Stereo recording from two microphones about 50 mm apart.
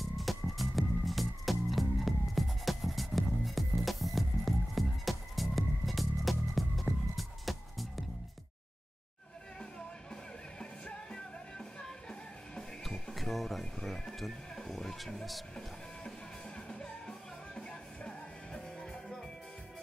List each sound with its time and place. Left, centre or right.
0.0 s music: centre
10.6 s music: centre
13.1 s a sound: centre
13.8 s speech: centre
16.5 s music: centre